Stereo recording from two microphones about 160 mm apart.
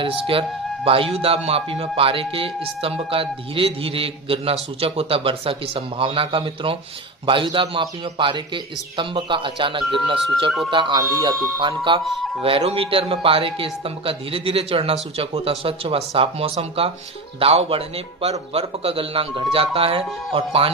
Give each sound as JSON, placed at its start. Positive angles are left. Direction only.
{"t": 0.0, "sound": "speech", "side_deg": -35}